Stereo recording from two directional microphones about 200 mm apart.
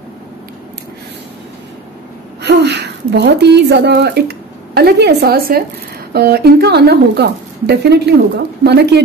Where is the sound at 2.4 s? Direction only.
55° right (ahead or behind).